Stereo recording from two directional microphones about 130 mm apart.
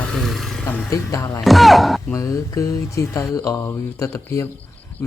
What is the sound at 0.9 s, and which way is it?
Speech, 25° left (ahead or behind).